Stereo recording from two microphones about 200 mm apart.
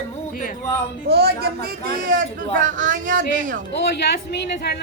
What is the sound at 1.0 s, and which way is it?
Speech, 55° right (ahead or behind).